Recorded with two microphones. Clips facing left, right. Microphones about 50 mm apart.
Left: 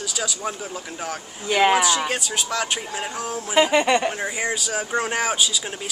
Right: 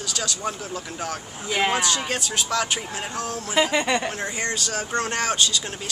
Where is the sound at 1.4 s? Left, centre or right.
Left.